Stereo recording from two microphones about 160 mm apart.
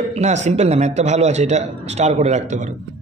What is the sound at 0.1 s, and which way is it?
A man's voice, 45° right (ahead or behind).